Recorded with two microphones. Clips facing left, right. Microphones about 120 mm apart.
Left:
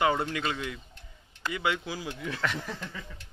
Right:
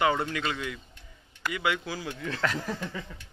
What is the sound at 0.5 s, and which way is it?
Speech, 25° left (ahead or behind).